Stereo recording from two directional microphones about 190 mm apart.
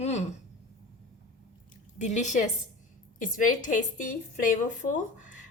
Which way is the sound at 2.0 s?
40° left (ahead or behind).